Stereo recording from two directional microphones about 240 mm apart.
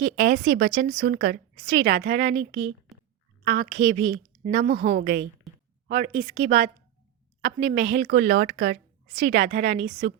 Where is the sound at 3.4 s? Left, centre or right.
Right.